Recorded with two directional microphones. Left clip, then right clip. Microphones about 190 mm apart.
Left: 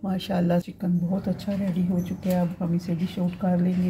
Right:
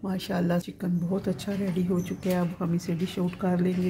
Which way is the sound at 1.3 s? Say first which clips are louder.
Left 1 dB; 25° right (ahead or behind).